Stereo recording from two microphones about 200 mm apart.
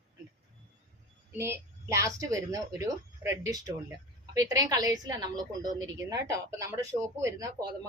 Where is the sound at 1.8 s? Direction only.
15° right (ahead or behind).